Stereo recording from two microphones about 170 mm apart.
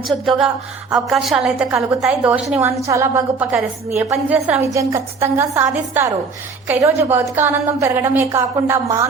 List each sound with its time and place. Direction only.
0.1 s a woman's voice: centre (ahead or behind)